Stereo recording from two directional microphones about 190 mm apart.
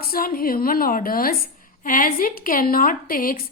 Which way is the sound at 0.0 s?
50° left (ahead or behind).